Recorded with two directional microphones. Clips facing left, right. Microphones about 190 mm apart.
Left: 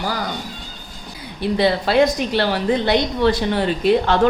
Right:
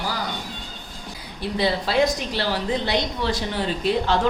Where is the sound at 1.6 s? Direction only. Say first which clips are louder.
Left 5 dB; 60° left (ahead or behind).